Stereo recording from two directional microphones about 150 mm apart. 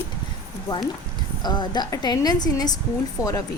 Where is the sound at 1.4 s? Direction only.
30° left (ahead or behind).